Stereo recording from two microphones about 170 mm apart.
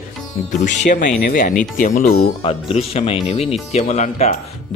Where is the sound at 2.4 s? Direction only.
35° left (ahead or behind).